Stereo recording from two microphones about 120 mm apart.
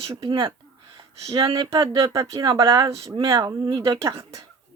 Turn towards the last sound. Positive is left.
turn(degrees=-35)  # may be behind; listen again after turning